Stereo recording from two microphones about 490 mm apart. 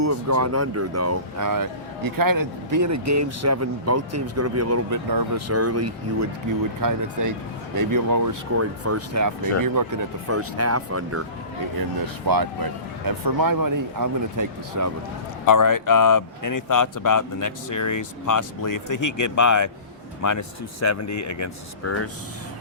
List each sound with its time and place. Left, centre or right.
0.0 s speech: right
11.8 s speech: right
15.4 s speech: left